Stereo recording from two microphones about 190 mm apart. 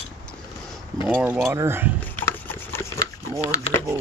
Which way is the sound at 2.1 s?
10° left (ahead or behind).